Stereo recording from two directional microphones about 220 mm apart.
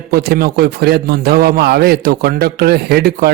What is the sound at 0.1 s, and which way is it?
A man's voice, 45° right (ahead or behind).